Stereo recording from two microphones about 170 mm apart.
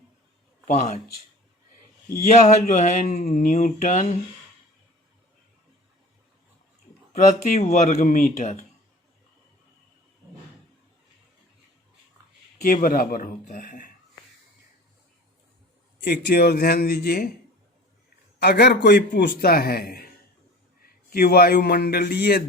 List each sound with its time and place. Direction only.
0.7 s speech: 45° left (ahead or behind)
2.2 s speech: 45° left (ahead or behind)
7.1 s speech: 45° left (ahead or behind)
12.6 s a man's voice: 55° left (ahead or behind)
16.0 s a man's voice: 75° left (ahead or behind)
18.3 s a man's voice: 75° left (ahead or behind)